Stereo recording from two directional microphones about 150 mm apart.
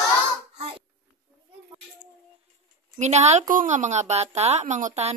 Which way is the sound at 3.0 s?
50° right (ahead or behind).